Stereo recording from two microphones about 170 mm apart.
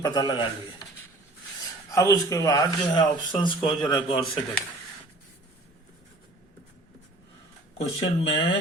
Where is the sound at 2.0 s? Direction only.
15° left (ahead or behind).